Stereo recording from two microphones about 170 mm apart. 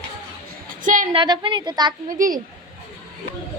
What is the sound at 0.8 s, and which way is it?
Speech, 50° right (ahead or behind).